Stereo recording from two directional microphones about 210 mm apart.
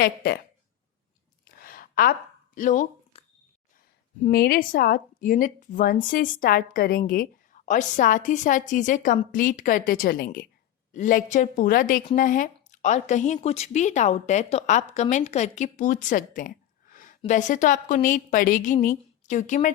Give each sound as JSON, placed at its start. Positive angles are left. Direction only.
{"t": 0.0, "sound": "speech", "side_deg": 45}
{"t": 1.5, "sound": "a sound", "side_deg": 45}
{"t": 2.6, "sound": "speech", "side_deg": 40}
{"t": 4.2, "sound": "a woman's voice", "side_deg": 45}